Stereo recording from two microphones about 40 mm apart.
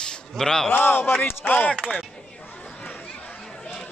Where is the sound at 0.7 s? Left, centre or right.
Left.